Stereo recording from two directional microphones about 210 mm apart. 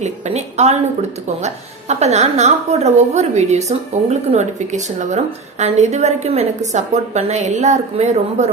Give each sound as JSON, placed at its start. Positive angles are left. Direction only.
{"t": 0.0, "sound": "a woman's voice", "side_deg": -30}